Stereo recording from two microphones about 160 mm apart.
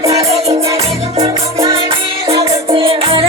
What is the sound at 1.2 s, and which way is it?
Music, 35° right (ahead or behind).